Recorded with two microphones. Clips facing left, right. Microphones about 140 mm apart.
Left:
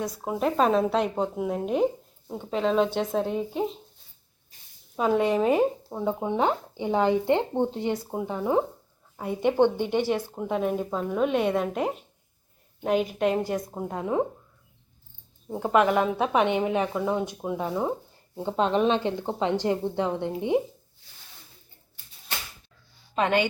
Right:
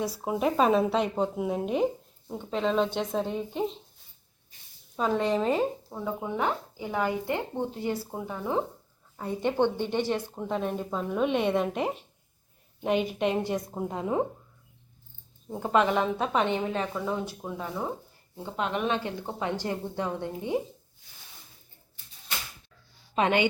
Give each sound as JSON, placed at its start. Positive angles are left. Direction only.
{"t": 0.0, "sound": "speech", "side_deg": -5}
{"t": 4.9, "sound": "a woman's voice", "side_deg": 10}
{"t": 15.4, "sound": "a woman's voice", "side_deg": 5}
{"t": 23.1, "sound": "a woman's voice", "side_deg": -20}